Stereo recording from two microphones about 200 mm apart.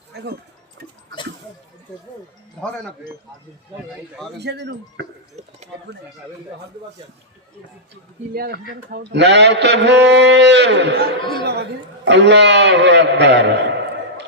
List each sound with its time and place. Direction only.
0.1 s a man's voice: 55° right (ahead or behind)
2.6 s speech: 5° left (ahead or behind)
4.4 s a man's voice: 55° right (ahead or behind)
8.3 s a man's voice: 50° right (ahead or behind)